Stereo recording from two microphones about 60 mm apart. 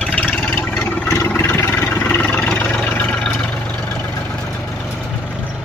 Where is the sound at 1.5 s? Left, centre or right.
Left.